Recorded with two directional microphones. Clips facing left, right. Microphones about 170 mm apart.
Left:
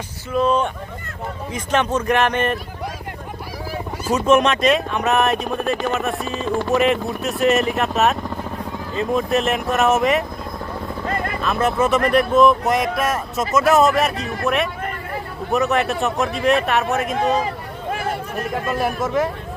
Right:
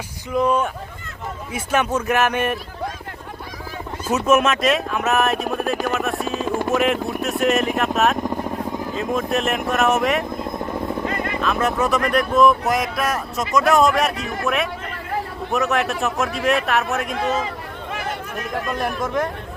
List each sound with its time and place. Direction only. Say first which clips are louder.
0.3 s speech: left 1 dB; 10° right (ahead or behind)
4.1 s speech: left 1 dB; 5° right (ahead or behind)
11.0 s vehicle: even; 40° left (ahead or behind)
11.3 s speech: left 2 dB; centre (ahead or behind)
18.5 s speech: left 2 dB; centre (ahead or behind)